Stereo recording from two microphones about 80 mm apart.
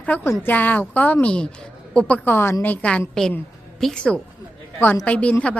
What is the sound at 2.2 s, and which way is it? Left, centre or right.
Speech, left.